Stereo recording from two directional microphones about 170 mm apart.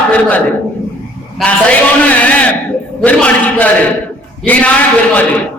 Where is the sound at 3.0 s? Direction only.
10° left (ahead or behind).